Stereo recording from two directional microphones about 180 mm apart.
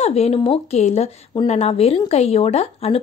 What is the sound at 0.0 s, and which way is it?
Speech, 35° left (ahead or behind).